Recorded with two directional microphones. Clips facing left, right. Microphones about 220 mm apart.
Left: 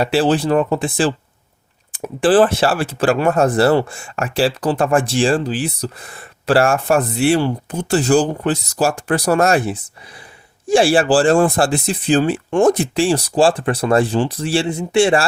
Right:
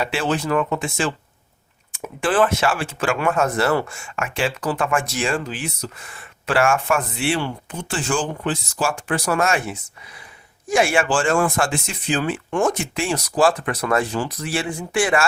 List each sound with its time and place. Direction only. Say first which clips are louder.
0.0 s speech: left 7 dB; 35° left (ahead or behind)